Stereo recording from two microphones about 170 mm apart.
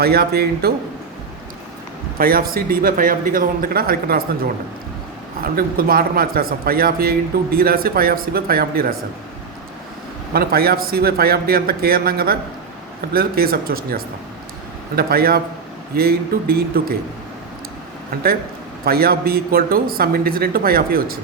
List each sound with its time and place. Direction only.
0.0 s a man's voice: 65° right (ahead or behind)
2.1 s a man's voice: 60° right (ahead or behind)
5.4 s a man's voice: 60° right (ahead or behind)
10.3 s a man's voice: 65° right (ahead or behind)
18.9 s a man's voice: 60° right (ahead or behind)